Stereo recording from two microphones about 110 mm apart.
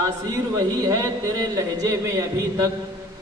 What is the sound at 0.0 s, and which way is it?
A man's voice, 35° right (ahead or behind).